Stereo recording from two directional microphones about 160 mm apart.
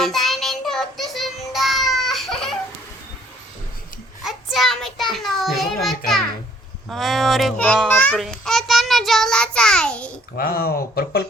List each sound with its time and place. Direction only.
0.0 s child singing: centre (ahead or behind)
4.2 s child singing: centre (ahead or behind)
6.8 s a sound: centre (ahead or behind)
7.9 s a child's voice: 10° left (ahead or behind)
10.3 s speech: 65° left (ahead or behind)